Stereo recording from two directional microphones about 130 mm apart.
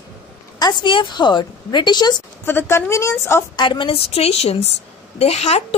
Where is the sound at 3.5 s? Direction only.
35° left (ahead or behind).